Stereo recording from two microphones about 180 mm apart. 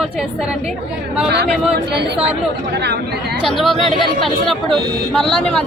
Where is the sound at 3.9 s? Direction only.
30° left (ahead or behind).